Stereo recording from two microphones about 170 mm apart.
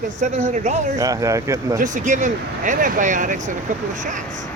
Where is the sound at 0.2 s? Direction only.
45° right (ahead or behind).